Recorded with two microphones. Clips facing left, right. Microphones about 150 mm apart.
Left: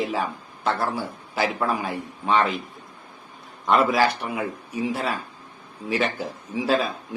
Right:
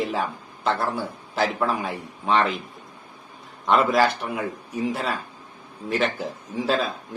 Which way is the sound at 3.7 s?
Centre (ahead or behind).